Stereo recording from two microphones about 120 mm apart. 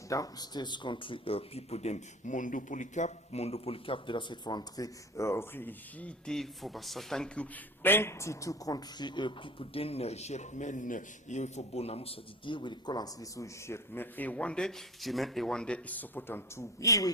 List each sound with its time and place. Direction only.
0.1 s speech: 30° left (ahead or behind); by 7.4 s 5° left (ahead or behind)
7.8 s speech: 15° left (ahead or behind)